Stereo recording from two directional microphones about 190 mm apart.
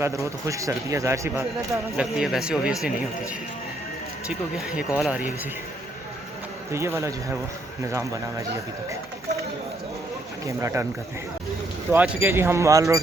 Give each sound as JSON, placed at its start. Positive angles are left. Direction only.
{"t": 0.0, "sound": "a man's voice", "side_deg": -15}
{"t": 2.1, "sound": "speech", "side_deg": -5}
{"t": 4.3, "sound": "speech", "side_deg": -5}
{"t": 6.7, "sound": "a man's voice", "side_deg": -15}
{"t": 10.4, "sound": "a man's voice", "side_deg": -15}
{"t": 11.9, "sound": "a man's voice", "side_deg": -10}